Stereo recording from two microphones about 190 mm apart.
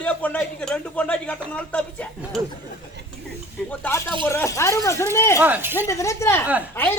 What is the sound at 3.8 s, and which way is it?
Speech, 10° left (ahead or behind).